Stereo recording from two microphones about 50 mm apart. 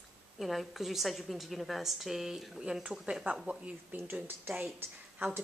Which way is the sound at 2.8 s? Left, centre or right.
Right.